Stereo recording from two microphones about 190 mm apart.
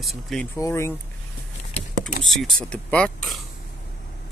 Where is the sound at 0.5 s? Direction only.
15° left (ahead or behind).